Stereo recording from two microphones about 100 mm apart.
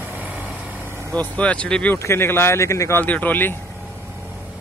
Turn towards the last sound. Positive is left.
turn(degrees=20)  # may be behind; listen again after turning